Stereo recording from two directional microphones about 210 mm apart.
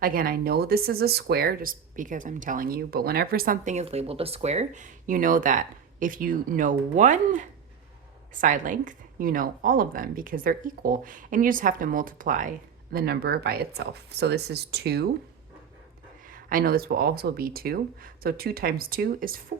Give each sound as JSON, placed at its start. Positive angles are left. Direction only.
{"t": 0.0, "sound": "speech", "side_deg": -45}
{"t": 16.3, "sound": "speech", "side_deg": -40}